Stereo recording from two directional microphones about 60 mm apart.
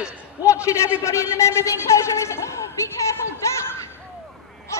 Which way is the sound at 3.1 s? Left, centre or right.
Left.